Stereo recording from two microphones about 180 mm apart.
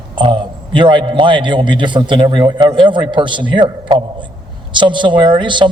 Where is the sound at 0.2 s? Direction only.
25° right (ahead or behind).